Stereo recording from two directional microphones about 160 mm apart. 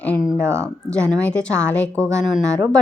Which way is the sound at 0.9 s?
5° left (ahead or behind).